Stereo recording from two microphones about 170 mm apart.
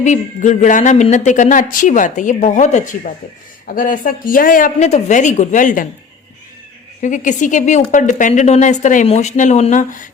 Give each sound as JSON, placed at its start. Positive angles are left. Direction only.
{"t": 0.0, "sound": "speech", "side_deg": 45}
{"t": 7.0, "sound": "speech", "side_deg": 45}